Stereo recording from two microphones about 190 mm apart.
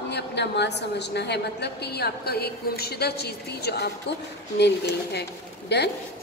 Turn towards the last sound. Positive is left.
turn(degrees=60)  # may be behind; listen again after turning